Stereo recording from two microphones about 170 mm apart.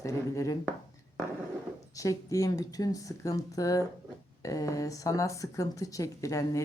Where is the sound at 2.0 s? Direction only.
20° left (ahead or behind).